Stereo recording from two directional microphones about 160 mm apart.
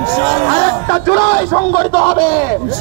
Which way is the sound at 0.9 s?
35° left (ahead or behind).